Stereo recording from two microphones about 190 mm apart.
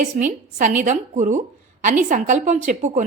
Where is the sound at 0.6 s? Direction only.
40° right (ahead or behind).